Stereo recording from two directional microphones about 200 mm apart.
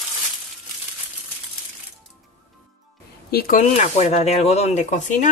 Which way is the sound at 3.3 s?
50° left (ahead or behind).